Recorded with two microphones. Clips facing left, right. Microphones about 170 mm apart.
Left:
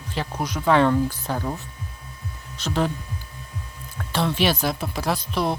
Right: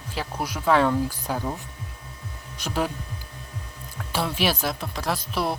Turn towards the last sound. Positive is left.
turn(degrees=-5)  # may be behind; listen again after turning